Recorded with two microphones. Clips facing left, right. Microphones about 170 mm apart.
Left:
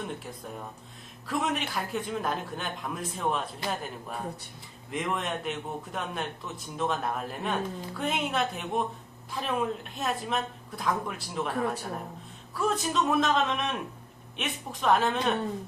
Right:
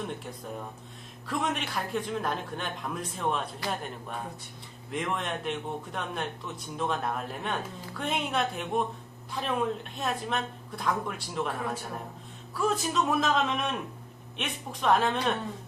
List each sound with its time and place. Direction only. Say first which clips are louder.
1.3 s a man's voice: left 1 dB; centre (ahead or behind)
12.5 s a man's voice: even; centre (ahead or behind)